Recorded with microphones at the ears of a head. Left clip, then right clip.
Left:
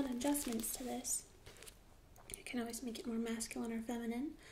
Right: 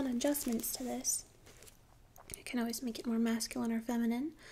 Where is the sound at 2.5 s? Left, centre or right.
Right.